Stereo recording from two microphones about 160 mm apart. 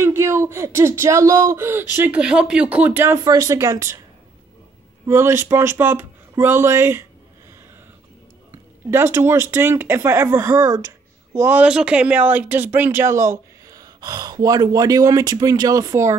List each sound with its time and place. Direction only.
0.0 s speech: 15° right (ahead or behind)
5.0 s speech: 15° right (ahead or behind)
8.9 s speech: 15° right (ahead or behind)